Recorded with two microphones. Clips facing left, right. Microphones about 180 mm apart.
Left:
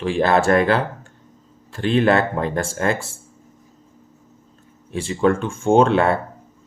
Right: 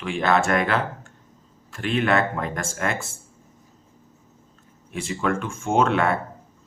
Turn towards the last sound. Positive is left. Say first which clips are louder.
# left 6 dB
turn(degrees=30)  # may be behind; listen again after turning